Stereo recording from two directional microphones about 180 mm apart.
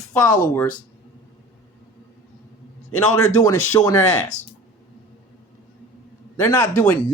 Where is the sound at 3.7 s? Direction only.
20° left (ahead or behind).